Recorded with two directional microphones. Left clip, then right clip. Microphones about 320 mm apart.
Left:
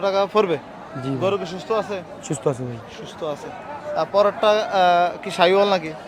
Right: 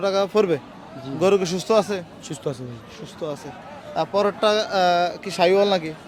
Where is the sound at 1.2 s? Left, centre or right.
Right.